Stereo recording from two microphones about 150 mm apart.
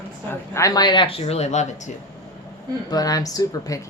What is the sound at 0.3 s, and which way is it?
Speech, 20° left (ahead or behind).